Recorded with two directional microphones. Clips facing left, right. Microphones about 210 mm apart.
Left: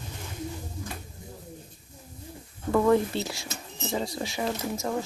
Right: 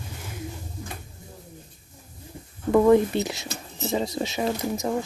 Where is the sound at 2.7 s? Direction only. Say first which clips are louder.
Right 5 dB; 20° right (ahead or behind).